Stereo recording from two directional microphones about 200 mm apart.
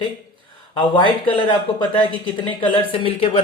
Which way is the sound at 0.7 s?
25° left (ahead or behind).